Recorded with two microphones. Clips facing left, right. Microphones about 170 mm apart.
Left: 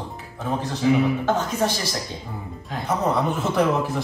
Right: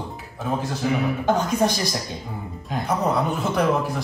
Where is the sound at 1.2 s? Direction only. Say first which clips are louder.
Right 2 dB; 15° right (ahead or behind).